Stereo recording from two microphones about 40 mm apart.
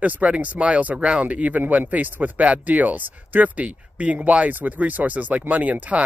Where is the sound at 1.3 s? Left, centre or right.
Right.